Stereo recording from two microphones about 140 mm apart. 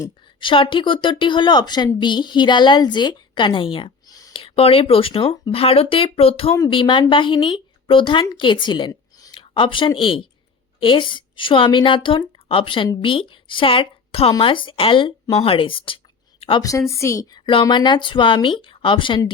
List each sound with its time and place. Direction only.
0.3 s a woman's voice: 35° left (ahead or behind)
16.9 s a woman's voice: 20° left (ahead or behind)
17.4 s a woman's voice: 35° left (ahead or behind)